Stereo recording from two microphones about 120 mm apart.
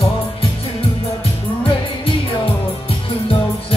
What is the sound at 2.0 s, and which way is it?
Music, 50° left (ahead or behind).